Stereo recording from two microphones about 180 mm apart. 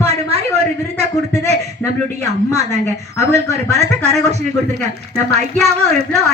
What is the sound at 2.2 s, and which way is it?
Speech, 40° right (ahead or behind).